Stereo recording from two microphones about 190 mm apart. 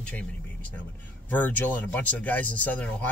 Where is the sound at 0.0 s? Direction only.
5° left (ahead or behind).